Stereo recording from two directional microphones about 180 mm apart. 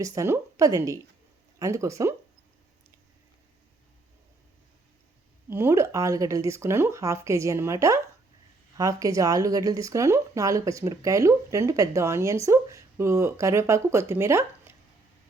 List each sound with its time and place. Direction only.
0.0 s speech: 20° right (ahead or behind)
5.5 s speech: 15° right (ahead or behind)